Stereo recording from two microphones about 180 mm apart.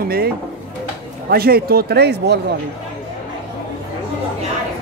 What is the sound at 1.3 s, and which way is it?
A man's voice, 55° right (ahead or behind).